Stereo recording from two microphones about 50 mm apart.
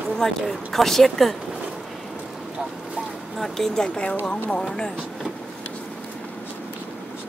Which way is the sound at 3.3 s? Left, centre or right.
Centre.